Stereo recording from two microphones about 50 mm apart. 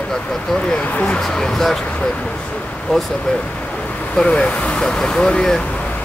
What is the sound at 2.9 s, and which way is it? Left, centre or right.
Speech, centre.